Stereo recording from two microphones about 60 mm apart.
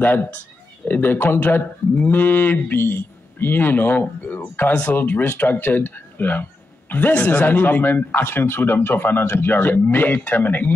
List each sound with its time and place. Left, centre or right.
0.8 s a man's voice: left